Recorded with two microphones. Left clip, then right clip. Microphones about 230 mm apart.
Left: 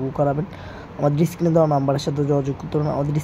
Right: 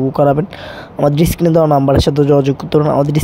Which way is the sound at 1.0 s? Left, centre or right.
Right.